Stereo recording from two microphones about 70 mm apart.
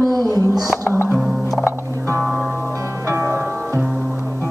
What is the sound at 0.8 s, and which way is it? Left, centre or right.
Music, left.